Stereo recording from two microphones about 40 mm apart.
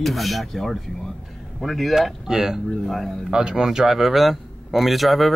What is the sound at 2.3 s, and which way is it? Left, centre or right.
Speech, centre.